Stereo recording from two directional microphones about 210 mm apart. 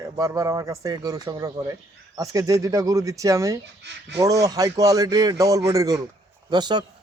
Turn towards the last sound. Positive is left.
turn(degrees=-20)  # may be behind; listen again after turning